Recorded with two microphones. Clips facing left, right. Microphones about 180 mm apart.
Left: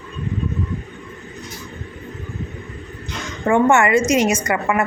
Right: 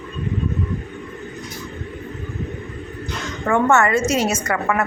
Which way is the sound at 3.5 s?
15° left (ahead or behind).